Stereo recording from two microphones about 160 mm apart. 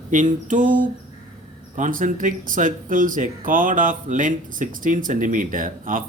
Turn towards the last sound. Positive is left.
turn(degrees=-60)  # may be behind; listen again after turning